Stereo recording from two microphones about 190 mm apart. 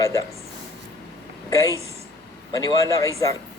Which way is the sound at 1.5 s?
15° left (ahead or behind).